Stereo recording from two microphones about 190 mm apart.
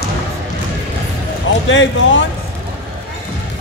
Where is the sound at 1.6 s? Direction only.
80° left.